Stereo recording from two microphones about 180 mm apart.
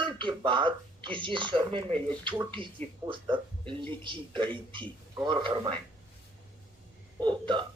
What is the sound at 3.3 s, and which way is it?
A man's voice, 25° right (ahead or behind).